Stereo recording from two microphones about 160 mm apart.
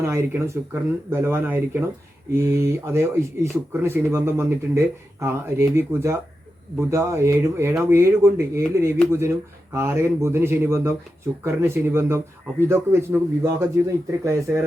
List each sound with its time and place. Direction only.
0.0 s speech: 15° right (ahead or behind)